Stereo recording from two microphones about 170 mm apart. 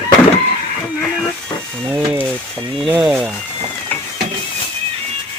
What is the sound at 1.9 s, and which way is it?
Speech, 15° right (ahead or behind).